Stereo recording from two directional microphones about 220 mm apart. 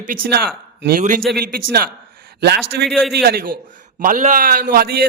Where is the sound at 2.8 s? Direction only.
Centre (ahead or behind).